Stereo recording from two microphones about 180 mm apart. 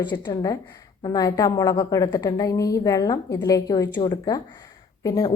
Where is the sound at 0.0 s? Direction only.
25° left (ahead or behind).